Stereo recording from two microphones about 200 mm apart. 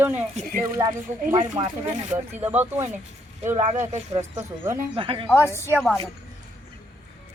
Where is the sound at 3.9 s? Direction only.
30° right (ahead or behind).